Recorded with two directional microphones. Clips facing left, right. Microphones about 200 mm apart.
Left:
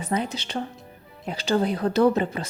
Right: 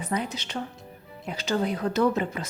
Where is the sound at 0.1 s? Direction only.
30° left (ahead or behind).